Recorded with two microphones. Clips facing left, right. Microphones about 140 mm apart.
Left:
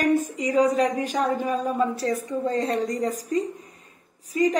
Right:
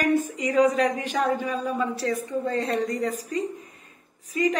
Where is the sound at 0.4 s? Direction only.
35° left (ahead or behind).